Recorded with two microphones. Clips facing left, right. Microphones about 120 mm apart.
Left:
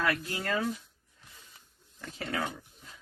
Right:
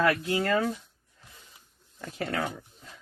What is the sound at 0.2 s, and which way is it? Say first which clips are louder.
Speech: right 6 dB; 60° right (ahead or behind).